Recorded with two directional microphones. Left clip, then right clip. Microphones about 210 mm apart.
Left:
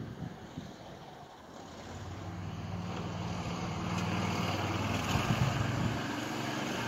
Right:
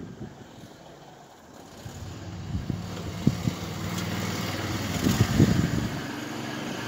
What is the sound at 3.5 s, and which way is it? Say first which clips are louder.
Vehicle: right 3 dB; 25° right (ahead or behind).